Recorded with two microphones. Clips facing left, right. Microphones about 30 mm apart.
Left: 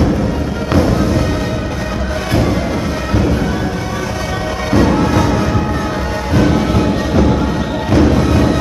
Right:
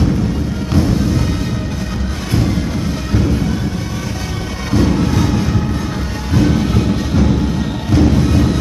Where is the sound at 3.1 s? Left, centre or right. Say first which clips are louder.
Left 2 dB; centre.